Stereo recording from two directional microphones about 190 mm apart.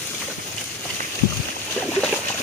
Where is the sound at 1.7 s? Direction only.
5° left (ahead or behind).